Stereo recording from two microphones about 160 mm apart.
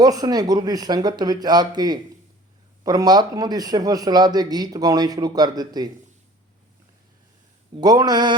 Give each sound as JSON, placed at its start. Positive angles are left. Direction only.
{"t": 0.0, "sound": "speech", "side_deg": -25}
{"t": 7.8, "sound": "speech", "side_deg": -25}